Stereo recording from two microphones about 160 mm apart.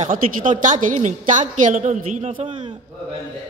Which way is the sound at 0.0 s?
55° right (ahead or behind).